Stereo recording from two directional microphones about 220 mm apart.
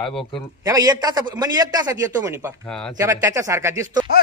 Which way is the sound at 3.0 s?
15° right (ahead or behind).